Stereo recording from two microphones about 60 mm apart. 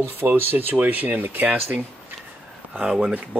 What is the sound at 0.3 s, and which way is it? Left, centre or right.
Speech, right.